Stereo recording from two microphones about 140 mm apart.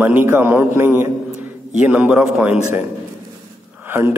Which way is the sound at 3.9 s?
15° right (ahead or behind).